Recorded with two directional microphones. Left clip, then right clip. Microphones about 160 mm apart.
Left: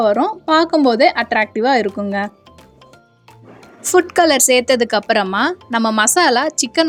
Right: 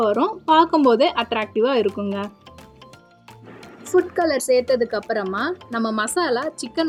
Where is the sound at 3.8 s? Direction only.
40° left (ahead or behind).